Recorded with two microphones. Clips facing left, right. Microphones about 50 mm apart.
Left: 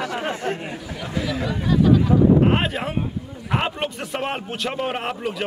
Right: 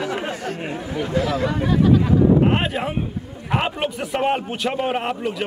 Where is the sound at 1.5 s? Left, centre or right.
Right.